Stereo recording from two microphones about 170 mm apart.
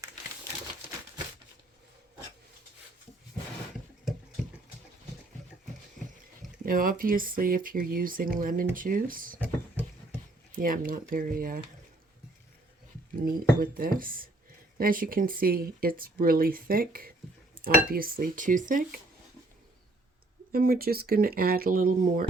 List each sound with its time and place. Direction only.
6.6 s speech: 55° right (ahead or behind)
10.5 s speech: 55° right (ahead or behind)
13.1 s speech: 55° right (ahead or behind)
20.5 s speech: 60° right (ahead or behind)